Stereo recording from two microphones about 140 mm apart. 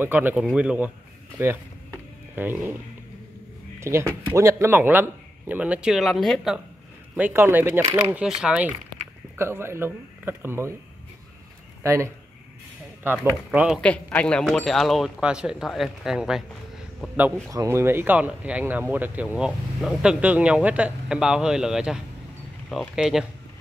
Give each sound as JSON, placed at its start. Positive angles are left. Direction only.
{"t": 0.0, "sound": "speech", "side_deg": -15}
{"t": 1.4, "sound": "a sound", "side_deg": -15}
{"t": 3.8, "sound": "speech", "side_deg": -20}
{"t": 7.2, "sound": "speech", "side_deg": -15}
{"t": 11.8, "sound": "speech", "side_deg": -20}
{"t": 14.0, "sound": "speech", "side_deg": 10}
{"t": 17.5, "sound": "speech", "side_deg": -20}